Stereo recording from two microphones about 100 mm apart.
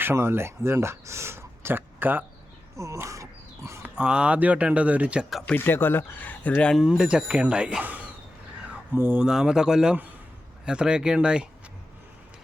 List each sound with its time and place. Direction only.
0.0 s speech: 25° right (ahead or behind)
2.7 s speech: 30° right (ahead or behind)
3.8 s speech: 10° right (ahead or behind)
5.5 s speech: 20° left (ahead or behind)
6.7 s speech: 5° right (ahead or behind)
8.7 s a sound: 15° right (ahead or behind)
9.2 s speech: 5° right (ahead or behind)